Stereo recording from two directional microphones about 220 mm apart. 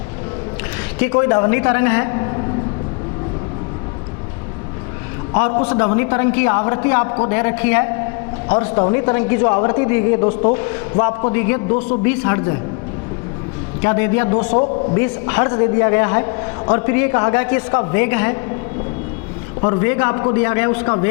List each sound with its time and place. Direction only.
1.1 s a man's voice: 20° left (ahead or behind)
5.3 s a man's voice: 15° left (ahead or behind)
10.2 s a man's voice: 35° left (ahead or behind)
10.5 s a man's voice: 15° left (ahead or behind)
13.8 s a man's voice: 15° left (ahead or behind)
19.6 s a man's voice: 20° left (ahead or behind)